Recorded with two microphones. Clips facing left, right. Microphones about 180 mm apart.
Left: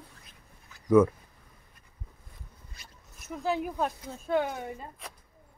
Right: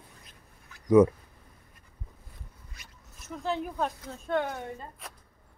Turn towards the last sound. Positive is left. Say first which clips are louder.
# left 1 dB
turn(degrees=5)  # may be behind; listen again after turning